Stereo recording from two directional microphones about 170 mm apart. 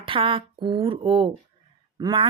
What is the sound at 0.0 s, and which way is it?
A woman's voice, 30° right (ahead or behind).